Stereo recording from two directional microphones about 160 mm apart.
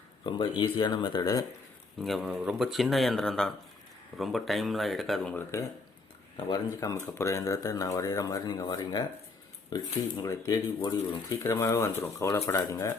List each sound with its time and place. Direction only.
0.3 s speech: 30° left (ahead or behind)
2.0 s speech: centre (ahead or behind); by 12.9 s 20° left (ahead or behind)